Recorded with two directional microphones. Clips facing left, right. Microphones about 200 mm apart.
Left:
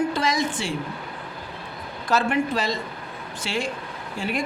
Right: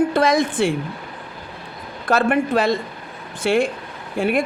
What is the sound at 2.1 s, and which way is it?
Speech, 55° right (ahead or behind).